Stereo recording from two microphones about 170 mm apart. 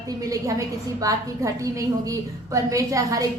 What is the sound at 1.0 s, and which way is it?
A woman's voice, 20° right (ahead or behind).